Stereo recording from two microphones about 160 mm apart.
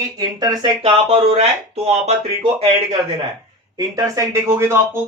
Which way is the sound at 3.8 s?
20° right (ahead or behind).